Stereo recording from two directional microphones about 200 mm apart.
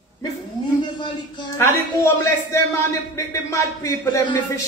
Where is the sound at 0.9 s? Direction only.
20° left (ahead or behind).